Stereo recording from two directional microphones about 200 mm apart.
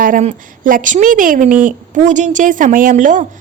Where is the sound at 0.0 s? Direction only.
40° right (ahead or behind).